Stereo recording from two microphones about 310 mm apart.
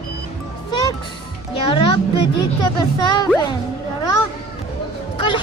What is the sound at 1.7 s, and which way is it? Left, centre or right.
Speech, centre.